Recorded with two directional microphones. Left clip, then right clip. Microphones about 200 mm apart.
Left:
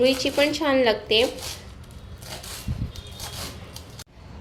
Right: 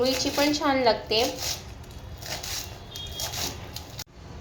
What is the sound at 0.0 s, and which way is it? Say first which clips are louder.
A woman's voice: left 4 dB; 35° left (ahead or behind).